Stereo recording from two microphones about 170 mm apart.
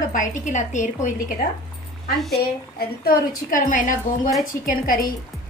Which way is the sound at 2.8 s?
60° left (ahead or behind).